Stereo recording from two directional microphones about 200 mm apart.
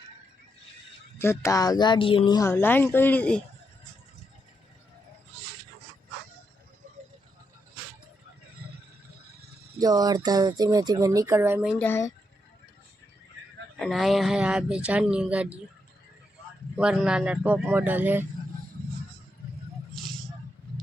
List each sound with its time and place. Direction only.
1.2 s speech: 15° left (ahead or behind)
9.7 s speech: 20° right (ahead or behind)
11.8 s speech: 10° left (ahead or behind)
13.7 s speech: centre (ahead or behind)
16.7 s speech: 5° right (ahead or behind)